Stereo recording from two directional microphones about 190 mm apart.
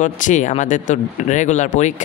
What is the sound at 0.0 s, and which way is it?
Speech, 40° left (ahead or behind).